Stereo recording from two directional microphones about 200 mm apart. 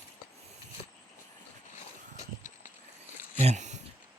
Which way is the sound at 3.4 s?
35° right (ahead or behind).